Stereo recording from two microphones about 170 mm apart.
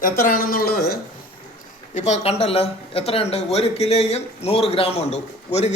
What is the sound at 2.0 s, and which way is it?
A man's voice, 40° left (ahead or behind).